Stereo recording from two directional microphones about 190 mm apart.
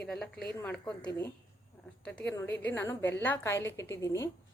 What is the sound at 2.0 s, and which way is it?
A woman's voice, 5° left (ahead or behind).